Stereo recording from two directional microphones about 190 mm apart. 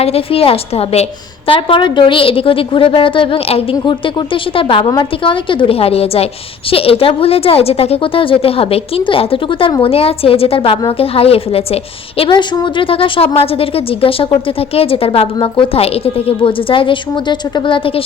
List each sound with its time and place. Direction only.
0.0 s a woman's voice: 30° left (ahead or behind)